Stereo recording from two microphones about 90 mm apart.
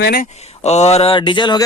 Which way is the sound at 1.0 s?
70° left (ahead or behind).